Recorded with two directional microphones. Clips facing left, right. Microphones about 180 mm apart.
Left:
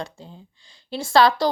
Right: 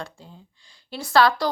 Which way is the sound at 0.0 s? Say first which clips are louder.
Left 3 dB; 20° left (ahead or behind).